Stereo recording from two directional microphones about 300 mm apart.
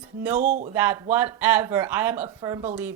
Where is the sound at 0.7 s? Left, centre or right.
Centre.